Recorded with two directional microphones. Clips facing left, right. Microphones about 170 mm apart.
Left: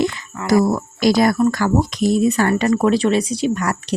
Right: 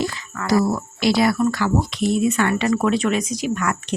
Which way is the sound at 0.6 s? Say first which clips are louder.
Left 3 dB; 45° left (ahead or behind).